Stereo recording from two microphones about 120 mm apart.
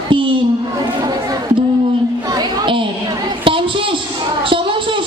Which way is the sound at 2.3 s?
40° right (ahead or behind).